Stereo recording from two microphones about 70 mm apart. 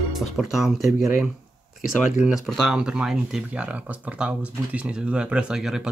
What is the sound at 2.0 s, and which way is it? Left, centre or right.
Speech, centre.